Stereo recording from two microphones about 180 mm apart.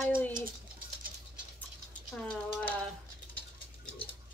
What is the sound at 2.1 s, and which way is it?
Speech, 5° left (ahead or behind).